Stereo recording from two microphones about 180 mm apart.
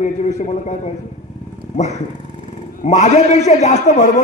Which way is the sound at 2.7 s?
40° left (ahead or behind).